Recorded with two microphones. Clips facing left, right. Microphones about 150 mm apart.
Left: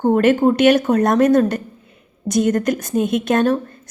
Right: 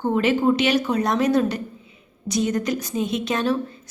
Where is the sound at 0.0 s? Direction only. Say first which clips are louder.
Left 6 dB; 50° left (ahead or behind).